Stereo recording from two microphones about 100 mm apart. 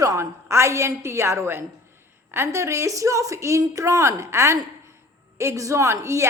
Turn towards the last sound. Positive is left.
turn(degrees=-30)  # may be behind; listen again after turning